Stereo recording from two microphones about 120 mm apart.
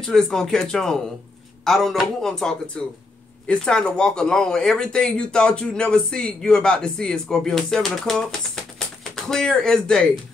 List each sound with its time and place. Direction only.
0.0 s speech: 5° left (ahead or behind)